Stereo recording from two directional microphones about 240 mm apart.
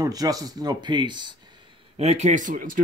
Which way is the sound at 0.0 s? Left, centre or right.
Centre.